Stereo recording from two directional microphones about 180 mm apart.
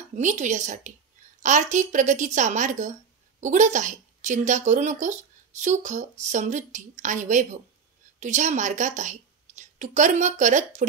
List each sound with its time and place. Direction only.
0.1 s a woman's voice: 45° right (ahead or behind)